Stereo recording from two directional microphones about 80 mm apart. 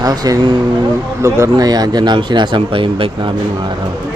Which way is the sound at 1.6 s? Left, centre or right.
Right.